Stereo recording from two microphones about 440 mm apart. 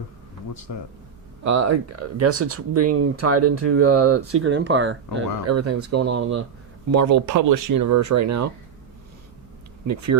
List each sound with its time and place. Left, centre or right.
1.5 s speech: right
6.0 s speech: right
6.9 s speech: right
9.8 s speech: right